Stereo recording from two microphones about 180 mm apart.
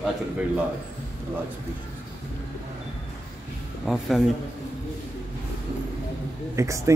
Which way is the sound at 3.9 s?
Centre (ahead or behind).